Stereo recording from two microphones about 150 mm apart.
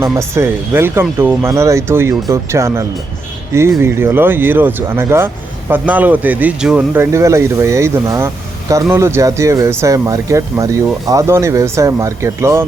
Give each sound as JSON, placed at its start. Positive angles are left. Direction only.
{"t": 0.0, "sound": "speech", "side_deg": -20}